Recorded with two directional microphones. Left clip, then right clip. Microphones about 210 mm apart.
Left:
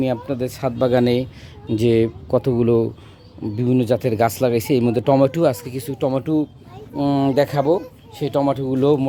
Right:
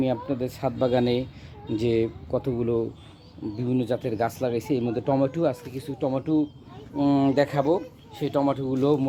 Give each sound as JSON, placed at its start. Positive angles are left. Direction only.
{"t": 0.0, "sound": "speech", "side_deg": 20}